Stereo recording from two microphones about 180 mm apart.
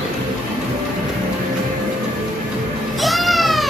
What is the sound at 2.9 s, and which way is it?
Cat, centre (ahead or behind).